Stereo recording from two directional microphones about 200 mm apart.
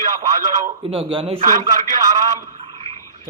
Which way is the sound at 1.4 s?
40° right (ahead or behind).